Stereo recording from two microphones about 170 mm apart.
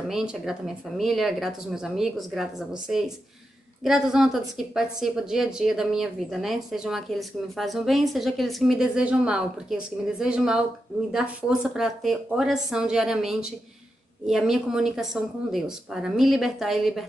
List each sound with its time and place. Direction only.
0.1 s a woman's voice: 5° right (ahead or behind)